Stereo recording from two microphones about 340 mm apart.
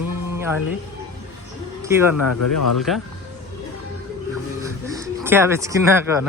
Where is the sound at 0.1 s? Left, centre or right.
Centre.